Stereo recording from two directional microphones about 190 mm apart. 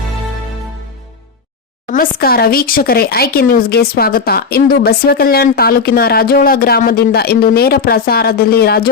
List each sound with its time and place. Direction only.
1.9 s speech: 50° left (ahead or behind)